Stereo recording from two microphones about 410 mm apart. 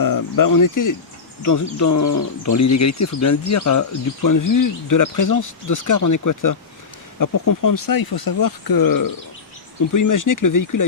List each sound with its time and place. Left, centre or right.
0.0 s speech: left